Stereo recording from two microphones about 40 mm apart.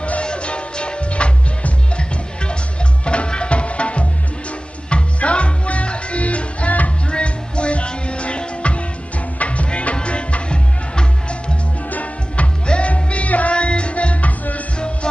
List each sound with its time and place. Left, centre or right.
0.0 s music: left
7.1 s music: left
11.9 s music: left